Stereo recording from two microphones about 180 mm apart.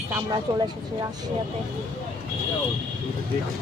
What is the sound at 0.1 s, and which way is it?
Speech, 20° right (ahead or behind).